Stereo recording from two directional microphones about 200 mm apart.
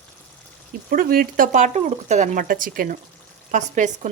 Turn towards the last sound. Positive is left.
turn(degrees=-40)  # may be behind; listen again after turning